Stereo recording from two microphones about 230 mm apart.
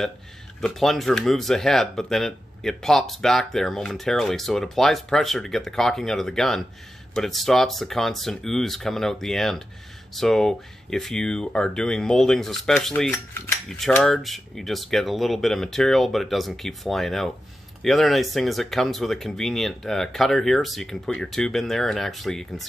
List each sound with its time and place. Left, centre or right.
0.6 s speech: centre